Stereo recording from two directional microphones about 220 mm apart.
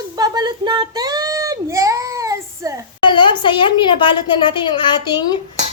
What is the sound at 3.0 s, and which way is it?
A woman's voice, 20° left (ahead or behind).